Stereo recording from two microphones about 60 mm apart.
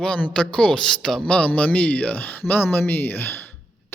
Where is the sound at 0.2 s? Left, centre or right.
Centre.